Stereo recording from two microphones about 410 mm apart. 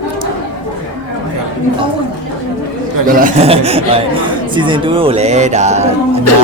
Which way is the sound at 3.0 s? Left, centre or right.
Centre.